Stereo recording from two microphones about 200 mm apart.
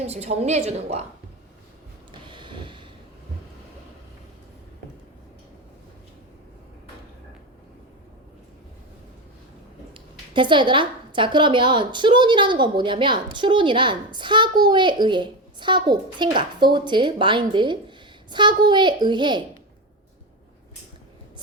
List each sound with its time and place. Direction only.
0.0 s a woman's voice: 35° right (ahead or behind)
2.2 s vehicle: 25° right (ahead or behind)
9.9 s a woman's voice: 25° right (ahead or behind)